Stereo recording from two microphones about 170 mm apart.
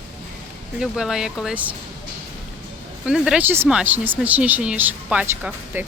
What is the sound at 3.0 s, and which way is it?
Speech, 5° right (ahead or behind).